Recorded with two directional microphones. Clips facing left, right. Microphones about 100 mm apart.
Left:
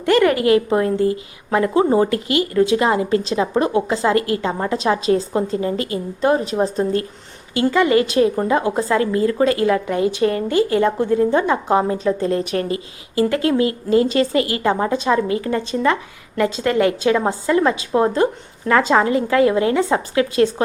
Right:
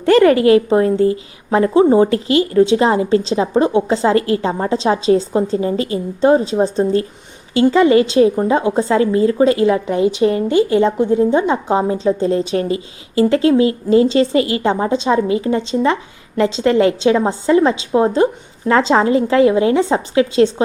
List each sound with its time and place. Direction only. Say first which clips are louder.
0.0 s a woman's voice: right 5 dB; 30° right (ahead or behind)